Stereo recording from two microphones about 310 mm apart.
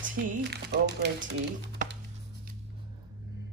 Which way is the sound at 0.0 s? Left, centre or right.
Right.